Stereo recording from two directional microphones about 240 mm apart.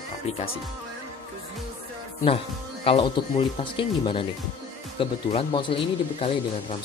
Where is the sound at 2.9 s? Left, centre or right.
Left.